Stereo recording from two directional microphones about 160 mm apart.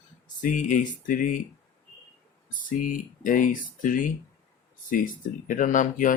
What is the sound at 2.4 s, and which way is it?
Speech, 55° left (ahead or behind).